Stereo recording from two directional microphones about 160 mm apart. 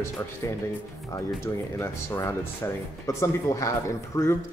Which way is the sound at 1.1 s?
20° left (ahead or behind).